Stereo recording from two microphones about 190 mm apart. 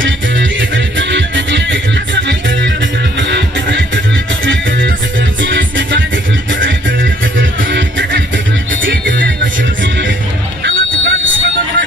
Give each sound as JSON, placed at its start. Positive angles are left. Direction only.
{"t": 0.0, "sound": "music", "side_deg": -85}
{"t": 3.2, "sound": "music", "side_deg": -70}
{"t": 5.4, "sound": "music", "side_deg": -80}
{"t": 7.7, "sound": "music", "side_deg": -75}
{"t": 10.6, "sound": "a sound", "side_deg": -80}